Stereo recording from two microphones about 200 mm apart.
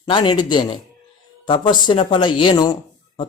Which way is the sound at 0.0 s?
25° left (ahead or behind).